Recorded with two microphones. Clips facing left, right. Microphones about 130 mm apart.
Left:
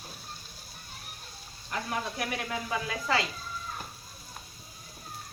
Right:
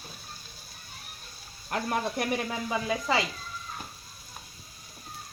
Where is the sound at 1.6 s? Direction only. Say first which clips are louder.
Right 4 dB; 50° right (ahead or behind).